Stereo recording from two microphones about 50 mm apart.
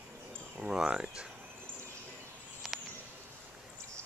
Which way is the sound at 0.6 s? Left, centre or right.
Centre.